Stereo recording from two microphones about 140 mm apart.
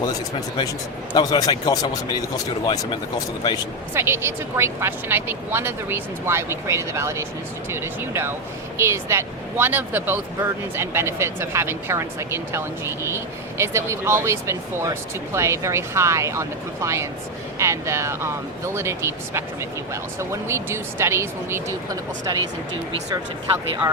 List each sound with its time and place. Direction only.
0.0 s speech: 25° left (ahead or behind)
3.9 s speech: 15° right (ahead or behind)